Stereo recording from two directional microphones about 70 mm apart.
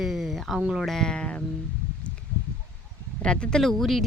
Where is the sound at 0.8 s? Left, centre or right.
Centre.